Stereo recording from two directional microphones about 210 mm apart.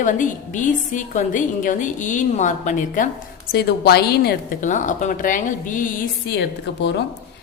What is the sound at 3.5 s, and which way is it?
A woman's voice, 50° left (ahead or behind).